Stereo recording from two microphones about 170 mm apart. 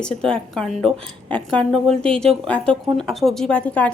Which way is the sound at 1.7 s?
35° right (ahead or behind).